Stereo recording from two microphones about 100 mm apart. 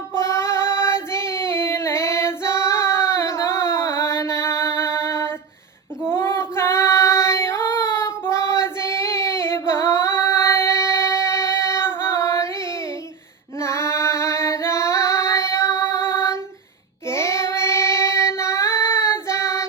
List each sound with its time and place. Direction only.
0.2 s child singing: 25° left (ahead or behind)
13.6 s female singing: 30° left (ahead or behind)
17.1 s child singing: 25° left (ahead or behind)